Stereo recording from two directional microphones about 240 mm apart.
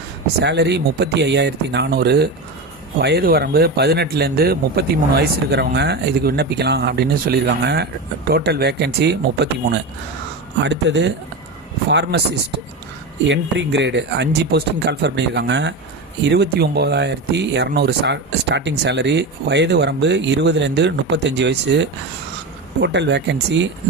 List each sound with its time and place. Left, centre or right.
0.4 s speech: right
13.2 s speech: right